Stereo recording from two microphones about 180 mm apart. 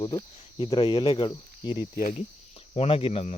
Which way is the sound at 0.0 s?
25° left (ahead or behind).